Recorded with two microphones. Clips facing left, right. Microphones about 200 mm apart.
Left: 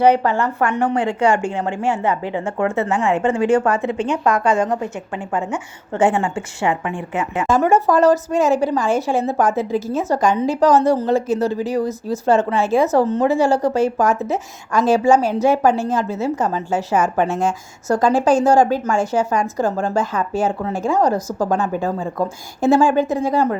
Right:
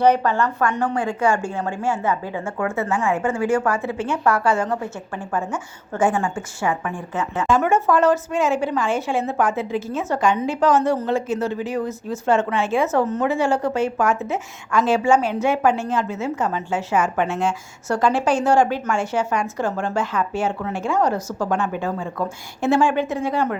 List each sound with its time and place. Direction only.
0.0 s a woman's voice: 10° left (ahead or behind)
7.4 s a woman's voice: 40° left (ahead or behind)